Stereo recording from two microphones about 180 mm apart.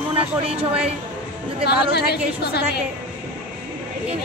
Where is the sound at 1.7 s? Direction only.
65° left (ahead or behind).